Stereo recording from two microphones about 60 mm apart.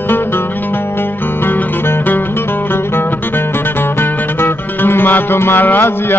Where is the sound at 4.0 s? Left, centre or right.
Left.